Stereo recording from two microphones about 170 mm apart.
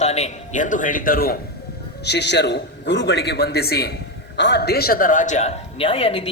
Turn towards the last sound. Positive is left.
turn(degrees=35)  # may be behind; listen again after turning